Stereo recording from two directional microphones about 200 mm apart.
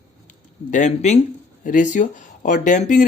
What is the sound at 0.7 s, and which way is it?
Speech, 35° left (ahead or behind).